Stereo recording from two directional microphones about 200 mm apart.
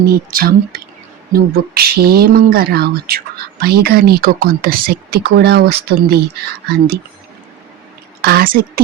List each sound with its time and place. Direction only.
0.0 s speech: 50° right (ahead or behind)
8.2 s speech: 50° right (ahead or behind)